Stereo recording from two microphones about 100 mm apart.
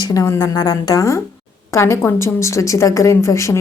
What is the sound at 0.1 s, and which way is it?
A woman's voice, 35° left (ahead or behind).